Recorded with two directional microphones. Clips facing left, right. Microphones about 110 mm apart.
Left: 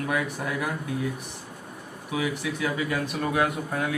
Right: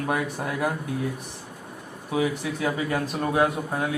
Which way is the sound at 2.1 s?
35° right (ahead or behind).